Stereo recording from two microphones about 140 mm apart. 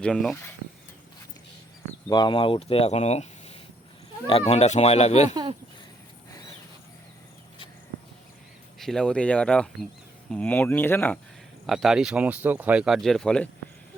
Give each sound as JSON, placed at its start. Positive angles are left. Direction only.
{"t": 0.0, "sound": "speech", "side_deg": 5}
{"t": 2.0, "sound": "speech", "side_deg": 30}
{"t": 8.8, "sound": "speech", "side_deg": 5}
{"t": 11.6, "sound": "speech", "side_deg": 0}